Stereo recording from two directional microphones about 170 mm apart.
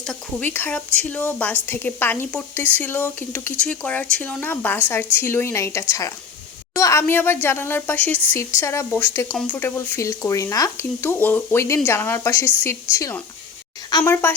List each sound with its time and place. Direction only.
0.1 s a woman's voice: 10° left (ahead or behind)